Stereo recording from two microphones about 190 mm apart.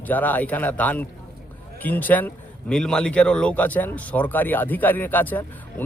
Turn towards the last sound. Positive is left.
turn(degrees=10)  # may be behind; listen again after turning